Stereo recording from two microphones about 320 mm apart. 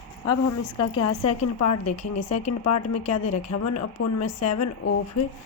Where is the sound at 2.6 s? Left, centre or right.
Left.